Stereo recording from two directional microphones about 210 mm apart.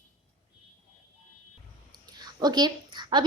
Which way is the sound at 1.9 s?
20° right (ahead or behind).